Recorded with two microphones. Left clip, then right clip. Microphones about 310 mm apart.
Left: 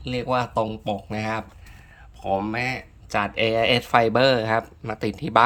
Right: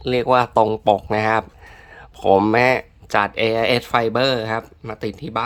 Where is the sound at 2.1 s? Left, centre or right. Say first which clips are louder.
Right 10 dB; right.